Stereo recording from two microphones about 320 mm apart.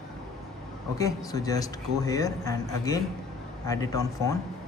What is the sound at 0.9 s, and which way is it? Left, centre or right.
A man's voice, centre.